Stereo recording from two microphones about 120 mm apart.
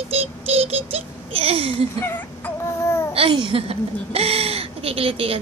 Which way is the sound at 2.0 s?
15° left (ahead or behind).